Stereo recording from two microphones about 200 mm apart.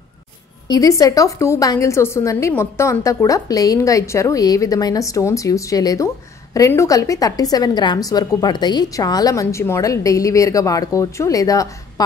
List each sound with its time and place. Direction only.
0.7 s a woman's voice: 15° left (ahead or behind)